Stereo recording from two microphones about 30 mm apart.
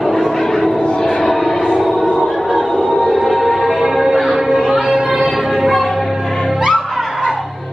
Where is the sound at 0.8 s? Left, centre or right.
Left.